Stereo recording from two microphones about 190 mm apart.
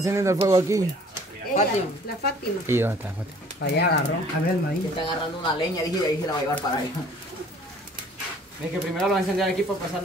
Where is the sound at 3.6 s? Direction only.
60° left (ahead or behind).